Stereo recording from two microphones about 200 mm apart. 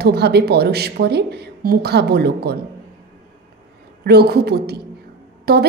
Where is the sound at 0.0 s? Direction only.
55° right (ahead or behind).